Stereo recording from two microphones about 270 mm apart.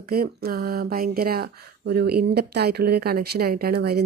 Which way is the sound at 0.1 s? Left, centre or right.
Right.